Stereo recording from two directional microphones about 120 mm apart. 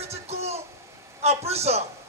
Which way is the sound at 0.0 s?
60° right (ahead or behind).